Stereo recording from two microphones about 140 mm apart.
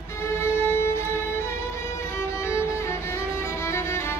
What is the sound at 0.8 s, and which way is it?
Music, 20° left (ahead or behind).